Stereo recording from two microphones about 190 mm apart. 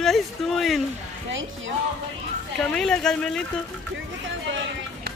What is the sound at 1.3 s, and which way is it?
Speech, 90° right.